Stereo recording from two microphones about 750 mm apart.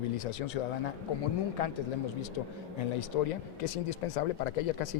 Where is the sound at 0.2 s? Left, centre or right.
Left.